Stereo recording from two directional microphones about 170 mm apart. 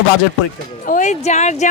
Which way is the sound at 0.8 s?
50° left (ahead or behind).